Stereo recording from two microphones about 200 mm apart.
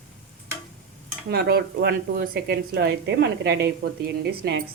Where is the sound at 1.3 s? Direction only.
50° right (ahead or behind).